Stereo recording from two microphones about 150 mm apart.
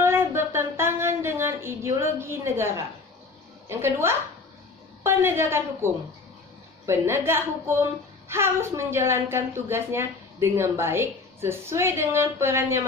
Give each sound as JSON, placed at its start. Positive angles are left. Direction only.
{"t": 0.0, "sound": "a sound", "side_deg": -15}
{"t": 3.6, "sound": "a woman's voice", "side_deg": -15}
{"t": 6.9, "sound": "a woman's voice", "side_deg": -15}